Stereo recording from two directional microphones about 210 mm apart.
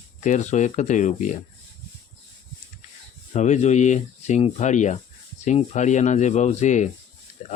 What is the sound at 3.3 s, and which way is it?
Speech, 35° left (ahead or behind).